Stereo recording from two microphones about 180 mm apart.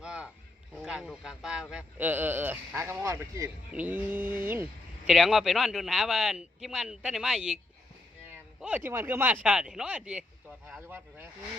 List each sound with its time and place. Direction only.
0.0 s a sound: 5° right (ahead or behind)
0.8 s a man's voice: 5° right (ahead or behind)
5.0 s speech: centre (ahead or behind)
8.6 s a man's voice: 10° right (ahead or behind)